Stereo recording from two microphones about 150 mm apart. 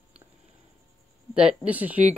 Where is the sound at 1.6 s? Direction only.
10° right (ahead or behind).